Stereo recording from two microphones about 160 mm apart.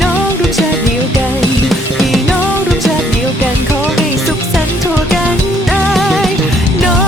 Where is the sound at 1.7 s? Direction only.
Centre (ahead or behind).